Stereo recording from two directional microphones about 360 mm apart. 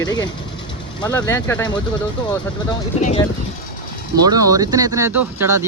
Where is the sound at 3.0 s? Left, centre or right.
Centre.